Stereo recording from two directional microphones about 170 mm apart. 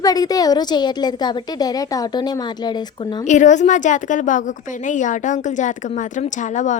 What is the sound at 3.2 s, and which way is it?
A woman's voice, 45° left (ahead or behind).